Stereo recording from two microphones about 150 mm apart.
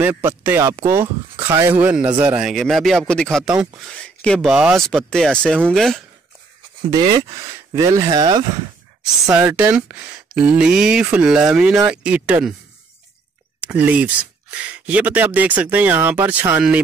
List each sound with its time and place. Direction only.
0.0 s speech: 15° right (ahead or behind); by 6.0 s centre (ahead or behind)
6.9 s speech: 30° right (ahead or behind)
9.3 s speech: 15° right (ahead or behind)
13.6 s speech: 10° right (ahead or behind)